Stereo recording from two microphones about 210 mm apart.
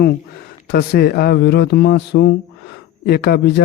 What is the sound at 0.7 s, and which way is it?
A man's voice, 45° left (ahead or behind).